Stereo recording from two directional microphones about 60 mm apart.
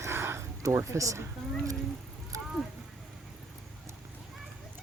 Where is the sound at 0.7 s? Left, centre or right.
Right.